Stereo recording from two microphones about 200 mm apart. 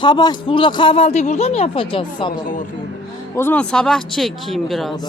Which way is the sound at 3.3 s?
10° left (ahead or behind).